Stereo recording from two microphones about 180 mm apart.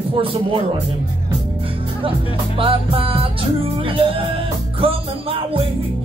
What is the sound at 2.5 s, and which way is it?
Music, 30° right (ahead or behind).